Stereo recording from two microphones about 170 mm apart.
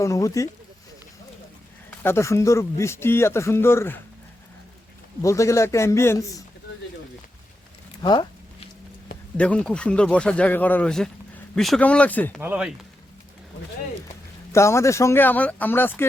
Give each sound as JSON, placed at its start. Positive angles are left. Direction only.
{"t": 0.0, "sound": "speech", "side_deg": 20}
{"t": 1.9, "sound": "speech", "side_deg": 15}
{"t": 5.2, "sound": "speech", "side_deg": 20}
{"t": 8.0, "sound": "a sound", "side_deg": 25}
{"t": 9.4, "sound": "speech", "side_deg": 5}
{"t": 12.4, "sound": "speech", "side_deg": -10}
{"t": 14.5, "sound": "speech", "side_deg": 15}